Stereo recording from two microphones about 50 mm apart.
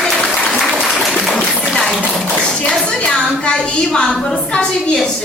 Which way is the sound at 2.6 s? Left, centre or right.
Left.